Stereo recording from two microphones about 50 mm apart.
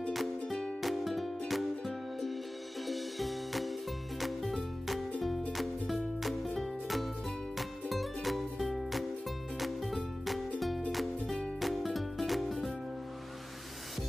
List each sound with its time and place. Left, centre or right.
0.5 s music: centre
0.8 s music: centre